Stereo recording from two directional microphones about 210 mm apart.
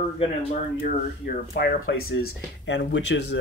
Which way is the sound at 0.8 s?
45° left (ahead or behind).